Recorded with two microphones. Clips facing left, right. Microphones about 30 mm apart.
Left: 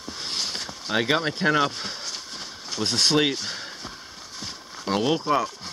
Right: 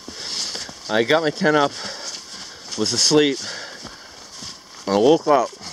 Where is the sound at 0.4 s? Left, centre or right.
Centre.